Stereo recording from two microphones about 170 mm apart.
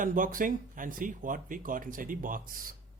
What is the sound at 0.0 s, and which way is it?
Speech, 50° right (ahead or behind).